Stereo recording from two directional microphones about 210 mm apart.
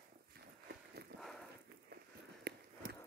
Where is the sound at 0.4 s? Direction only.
50° right (ahead or behind).